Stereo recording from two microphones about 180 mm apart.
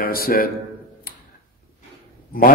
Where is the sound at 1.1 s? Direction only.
50° left (ahead or behind).